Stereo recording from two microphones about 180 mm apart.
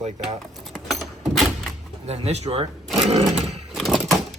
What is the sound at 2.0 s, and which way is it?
Speech, 35° right (ahead or behind).